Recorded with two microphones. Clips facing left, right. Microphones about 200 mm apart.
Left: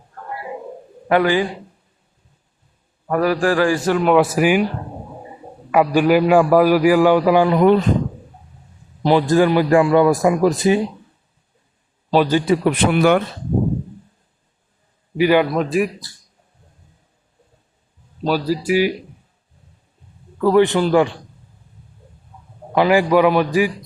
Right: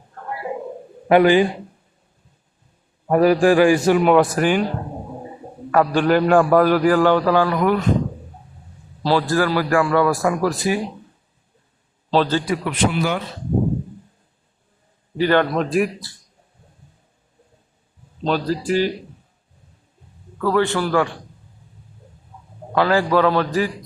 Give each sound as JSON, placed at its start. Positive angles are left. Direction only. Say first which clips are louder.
{"t": 1.0, "sound": "speech", "louder": "right 3 dB", "side_deg": -20}
{"t": 3.1, "sound": "a man's voice", "louder": "right 3 dB", "side_deg": -20}
{"t": 4.1, "sound": "a man's voice", "louder": "left 1 dB", "side_deg": 5}
{"t": 5.7, "sound": "a man's voice", "louder": "left 2 dB", "side_deg": 10}
{"t": 9.0, "sound": "a man's voice", "louder": "left 4 dB", "side_deg": 20}
{"t": 12.1, "sound": "a man's voice", "louder": "left 3 dB", "side_deg": 10}
{"t": 12.6, "sound": "a man's voice", "louder": "left 6 dB", "side_deg": 55}
{"t": 15.2, "sound": "speech", "louder": "left 2 dB", "side_deg": 10}
{"t": 18.2, "sound": "a man's voice", "louder": "left 2 dB", "side_deg": 5}
{"t": 20.4, "sound": "a man's voice", "louder": "left 5 dB", "side_deg": 20}
{"t": 22.7, "sound": "a man's voice", "louder": "left 3 dB", "side_deg": 15}